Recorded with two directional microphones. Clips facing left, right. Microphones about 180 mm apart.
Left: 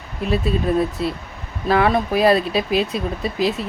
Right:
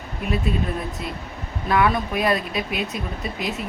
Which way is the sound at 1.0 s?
30° left (ahead or behind).